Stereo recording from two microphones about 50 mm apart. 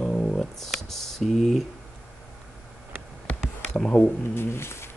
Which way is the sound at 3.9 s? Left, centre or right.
Left.